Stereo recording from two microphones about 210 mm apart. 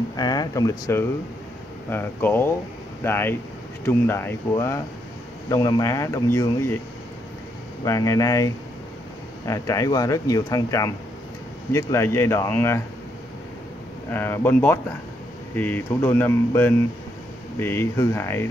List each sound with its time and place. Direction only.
0.1 s speech: 20° left (ahead or behind)
7.8 s speech: 15° left (ahead or behind)
14.1 s speech: 10° left (ahead or behind)